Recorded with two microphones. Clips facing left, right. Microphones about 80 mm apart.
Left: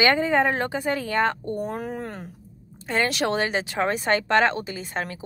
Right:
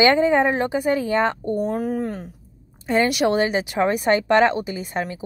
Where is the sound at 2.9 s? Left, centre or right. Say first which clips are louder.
Right 5 dB; centre.